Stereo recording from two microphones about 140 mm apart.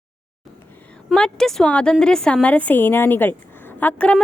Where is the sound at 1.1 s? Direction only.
5° left (ahead or behind).